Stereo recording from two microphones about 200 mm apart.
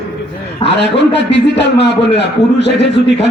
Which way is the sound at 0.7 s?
60° left (ahead or behind).